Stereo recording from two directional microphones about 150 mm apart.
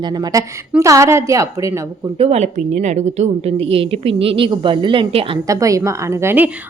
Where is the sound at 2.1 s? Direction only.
45° right (ahead or behind).